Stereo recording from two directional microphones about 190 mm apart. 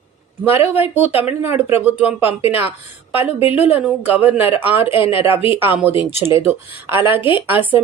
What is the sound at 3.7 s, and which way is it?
Speech, 10° right (ahead or behind).